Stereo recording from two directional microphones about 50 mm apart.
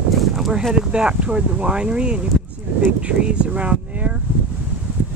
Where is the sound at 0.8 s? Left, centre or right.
Centre.